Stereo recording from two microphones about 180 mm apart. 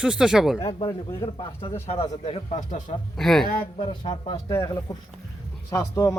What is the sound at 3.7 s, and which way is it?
Speech, 30° left (ahead or behind).